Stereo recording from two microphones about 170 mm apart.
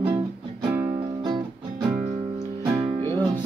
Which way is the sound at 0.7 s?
25° right (ahead or behind).